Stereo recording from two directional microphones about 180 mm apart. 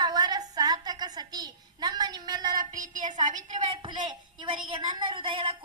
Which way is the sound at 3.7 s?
25° right (ahead or behind).